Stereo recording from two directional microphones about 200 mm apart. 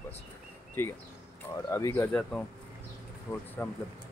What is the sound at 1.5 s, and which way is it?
Speech, 15° left (ahead or behind).